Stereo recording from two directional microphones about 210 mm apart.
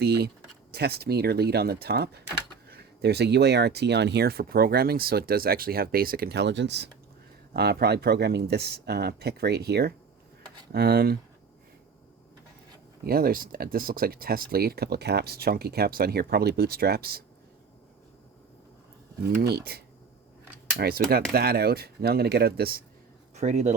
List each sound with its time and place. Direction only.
0.0 s speech: 50° right (ahead or behind)
13.1 s speech: 45° right (ahead or behind)
19.3 s speech: 45° right (ahead or behind)
23.3 s speech: 35° right (ahead or behind)